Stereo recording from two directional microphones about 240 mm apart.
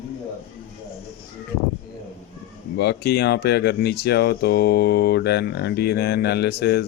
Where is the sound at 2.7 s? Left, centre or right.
Left.